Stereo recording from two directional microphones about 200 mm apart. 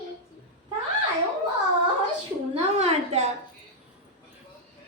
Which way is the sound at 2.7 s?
30° right (ahead or behind).